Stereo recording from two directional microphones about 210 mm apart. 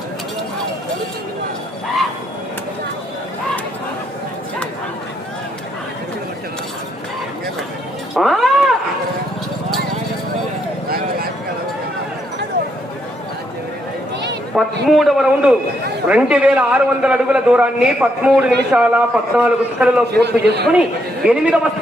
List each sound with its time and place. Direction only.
8.1 s music: centre (ahead or behind)
14.8 s a man's voice: centre (ahead or behind)
20.2 s a man's voice: 50° right (ahead or behind)
21.2 s a man's voice: 5° right (ahead or behind)